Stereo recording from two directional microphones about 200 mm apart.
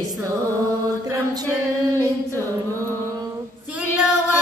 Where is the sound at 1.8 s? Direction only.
15° right (ahead or behind).